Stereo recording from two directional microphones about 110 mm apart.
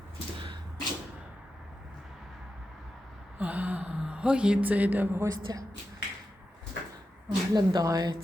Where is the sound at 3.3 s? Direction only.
15° right (ahead or behind).